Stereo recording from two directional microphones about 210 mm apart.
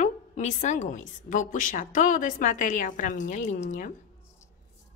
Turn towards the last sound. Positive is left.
turn(degrees=35)  # may be behind; listen again after turning